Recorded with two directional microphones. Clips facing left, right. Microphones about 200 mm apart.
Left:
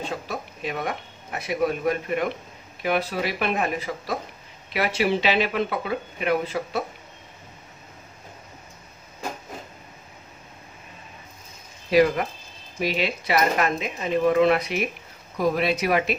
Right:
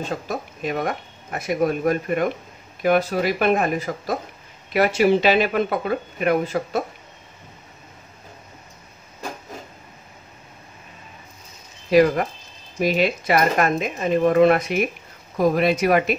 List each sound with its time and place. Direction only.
0.3 s speech: 45° right (ahead or behind)
11.9 s speech: 45° right (ahead or behind)